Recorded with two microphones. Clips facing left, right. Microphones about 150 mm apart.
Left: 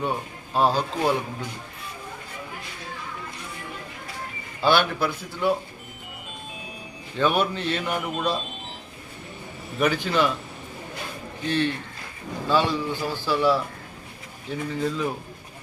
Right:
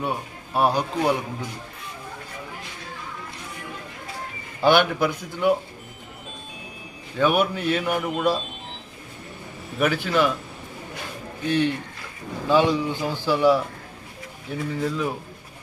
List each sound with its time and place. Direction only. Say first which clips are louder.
0.0 s a man's voice: even; 10° right (ahead or behind)
4.6 s a man's voice: right 3 dB; 15° right (ahead or behind)
7.2 s a man's voice: right 2 dB; 10° right (ahead or behind)
9.7 s a man's voice: right 1 dB; 5° right (ahead or behind)
11.4 s a man's voice: right 2 dB; 15° right (ahead or behind)
14.8 s a man's voice: even; 5° right (ahead or behind)